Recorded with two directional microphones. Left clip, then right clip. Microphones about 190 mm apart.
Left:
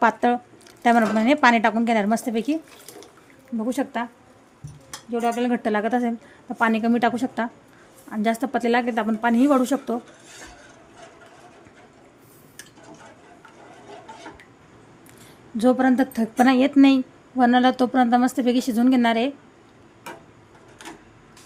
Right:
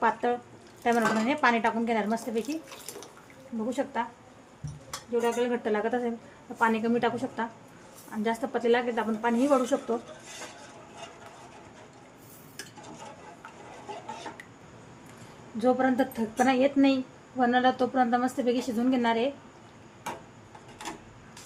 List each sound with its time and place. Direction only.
0.0 s speech: 55° left (ahead or behind)
3.7 s a woman's voice: 55° left (ahead or behind)
5.1 s a woman's voice: 60° left (ahead or behind)
15.5 s a woman's voice: 55° left (ahead or behind)